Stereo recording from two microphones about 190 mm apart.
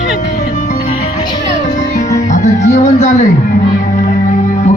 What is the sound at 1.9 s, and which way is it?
Music, 40° left (ahead or behind).